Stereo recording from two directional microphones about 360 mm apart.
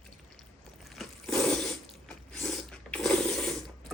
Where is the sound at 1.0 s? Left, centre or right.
Centre.